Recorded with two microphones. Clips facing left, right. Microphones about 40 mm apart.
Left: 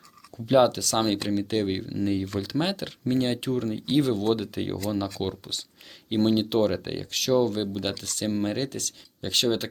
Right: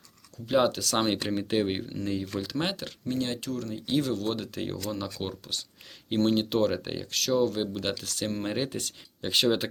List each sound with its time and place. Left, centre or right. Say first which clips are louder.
0.4 s speech: left 4 dB; centre
3.1 s speech: left 6 dB; left; by 8.5 s centre
8.5 s speech: left 1 dB; centre